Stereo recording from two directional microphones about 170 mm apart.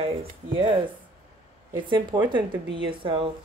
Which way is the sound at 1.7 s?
30° right (ahead or behind).